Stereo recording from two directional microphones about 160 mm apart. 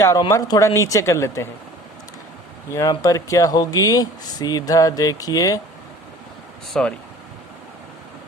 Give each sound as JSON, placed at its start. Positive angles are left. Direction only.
{"t": 0.0, "sound": "speech", "side_deg": 20}
{"t": 2.9, "sound": "speech", "side_deg": 20}
{"t": 6.8, "sound": "speech", "side_deg": 5}